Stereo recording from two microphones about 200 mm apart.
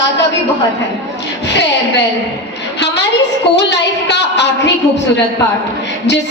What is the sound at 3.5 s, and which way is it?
A woman's voice, 60° left (ahead or behind).